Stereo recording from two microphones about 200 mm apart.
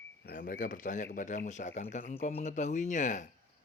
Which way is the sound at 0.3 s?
45° left (ahead or behind).